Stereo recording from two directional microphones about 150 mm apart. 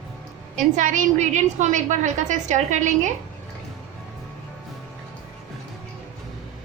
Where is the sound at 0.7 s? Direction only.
55° right (ahead or behind).